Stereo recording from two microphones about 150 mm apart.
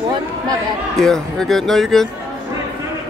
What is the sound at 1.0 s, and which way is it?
Speech, 5° left (ahead or behind).